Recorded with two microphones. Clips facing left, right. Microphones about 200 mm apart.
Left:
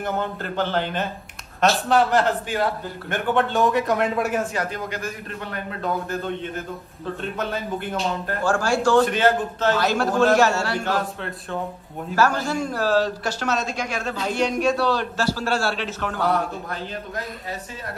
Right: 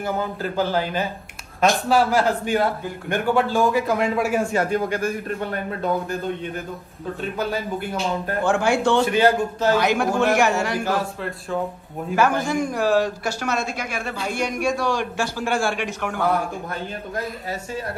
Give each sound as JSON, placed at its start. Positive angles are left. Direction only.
{"t": 0.0, "sound": "a man's voice", "side_deg": -5}
{"t": 4.6, "sound": "a man's voice", "side_deg": -50}
{"t": 8.5, "sound": "speech", "side_deg": -20}
{"t": 9.0, "sound": "a man's voice", "side_deg": -10}
{"t": 10.9, "sound": "a man's voice", "side_deg": 0}
{"t": 12.2, "sound": "a man's voice", "side_deg": -15}